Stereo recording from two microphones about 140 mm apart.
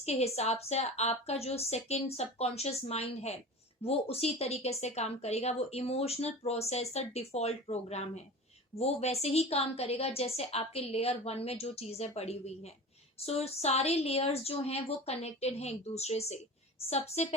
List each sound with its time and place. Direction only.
0.0 s a woman's voice: 50° left (ahead or behind)